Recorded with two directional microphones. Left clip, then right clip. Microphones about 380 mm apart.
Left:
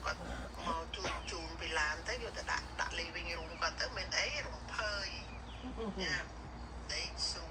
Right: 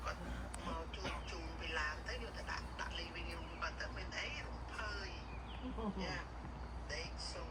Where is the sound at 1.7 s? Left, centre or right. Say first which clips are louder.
Left 6 dB; centre.